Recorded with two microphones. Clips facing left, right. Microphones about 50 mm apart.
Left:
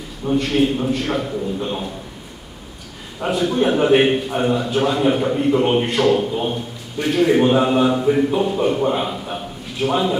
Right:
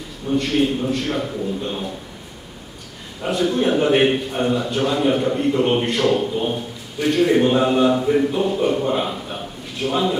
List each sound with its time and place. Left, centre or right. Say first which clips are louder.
0.3 s a man's voice: left 1 dB; centre
3.2 s a man's voice: left 1 dB; centre